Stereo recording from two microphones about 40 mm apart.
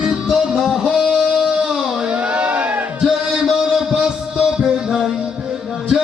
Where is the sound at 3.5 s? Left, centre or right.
Centre.